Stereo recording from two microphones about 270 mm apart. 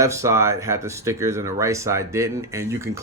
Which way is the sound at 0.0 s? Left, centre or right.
Centre.